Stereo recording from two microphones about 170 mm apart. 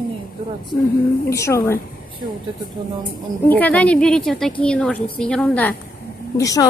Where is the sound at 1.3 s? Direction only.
15° left (ahead or behind).